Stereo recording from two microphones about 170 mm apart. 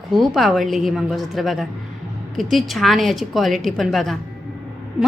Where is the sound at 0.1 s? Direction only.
Centre (ahead or behind).